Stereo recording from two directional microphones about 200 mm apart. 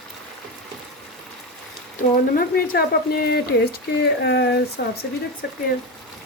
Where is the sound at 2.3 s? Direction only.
50° left (ahead or behind).